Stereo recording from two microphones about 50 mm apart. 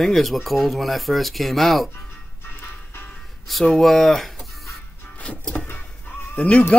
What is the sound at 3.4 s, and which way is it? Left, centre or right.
Speech, centre.